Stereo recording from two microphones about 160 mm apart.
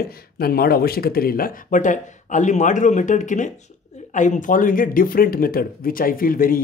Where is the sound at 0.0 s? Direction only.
70° left (ahead or behind).